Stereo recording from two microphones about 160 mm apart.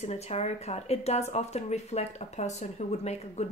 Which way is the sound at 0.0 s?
40° left (ahead or behind).